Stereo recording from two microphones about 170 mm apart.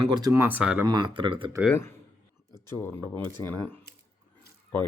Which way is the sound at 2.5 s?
15° left (ahead or behind).